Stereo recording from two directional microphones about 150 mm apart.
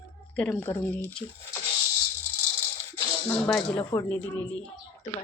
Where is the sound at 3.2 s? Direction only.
10° left (ahead or behind).